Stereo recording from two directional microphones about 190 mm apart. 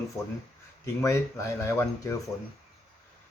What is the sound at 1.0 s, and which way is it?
Speech, 15° left (ahead or behind).